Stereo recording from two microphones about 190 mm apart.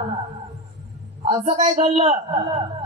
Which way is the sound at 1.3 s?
35° right (ahead or behind).